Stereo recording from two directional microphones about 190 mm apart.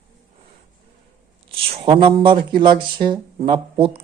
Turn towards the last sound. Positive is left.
turn(degrees=-30)  # may be behind; listen again after turning